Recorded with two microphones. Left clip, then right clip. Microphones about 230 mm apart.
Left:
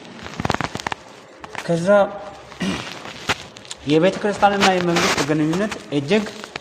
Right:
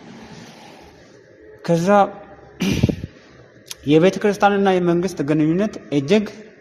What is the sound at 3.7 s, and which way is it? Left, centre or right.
Speech, right.